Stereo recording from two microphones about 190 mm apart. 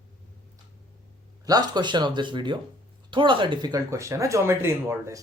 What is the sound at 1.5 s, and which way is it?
Speech, 20° right (ahead or behind).